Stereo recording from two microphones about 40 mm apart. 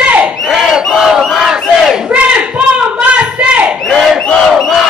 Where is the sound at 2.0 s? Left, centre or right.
Right.